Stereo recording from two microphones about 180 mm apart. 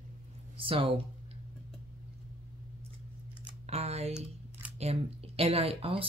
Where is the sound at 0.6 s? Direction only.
30° right (ahead or behind).